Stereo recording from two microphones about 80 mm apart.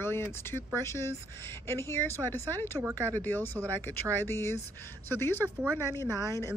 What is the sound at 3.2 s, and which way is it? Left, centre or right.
Speech, left.